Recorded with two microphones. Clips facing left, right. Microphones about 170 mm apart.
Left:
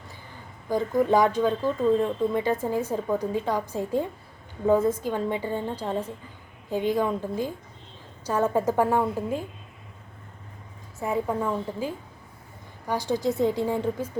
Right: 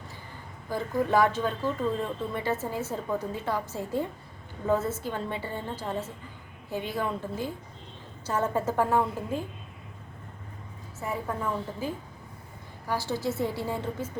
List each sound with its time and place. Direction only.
0.7 s speech: 15° left (ahead or behind)
11.0 s speech: 20° left (ahead or behind)
12.9 s speech: 15° left (ahead or behind)